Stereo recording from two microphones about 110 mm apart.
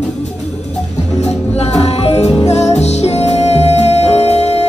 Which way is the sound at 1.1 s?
75° left (ahead or behind).